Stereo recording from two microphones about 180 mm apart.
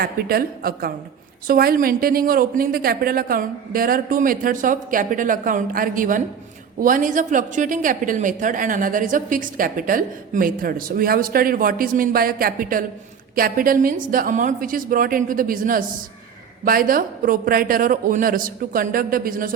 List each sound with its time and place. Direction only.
0.0 s a woman's voice: 55° right (ahead or behind)